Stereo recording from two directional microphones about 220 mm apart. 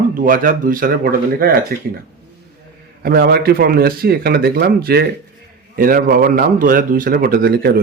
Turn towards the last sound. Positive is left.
turn(degrees=-45)  # may be behind; listen again after turning